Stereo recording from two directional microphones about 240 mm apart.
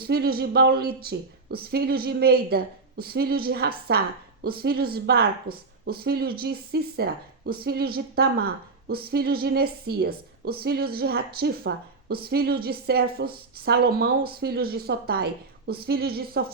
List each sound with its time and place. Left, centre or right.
0.0 s speech: right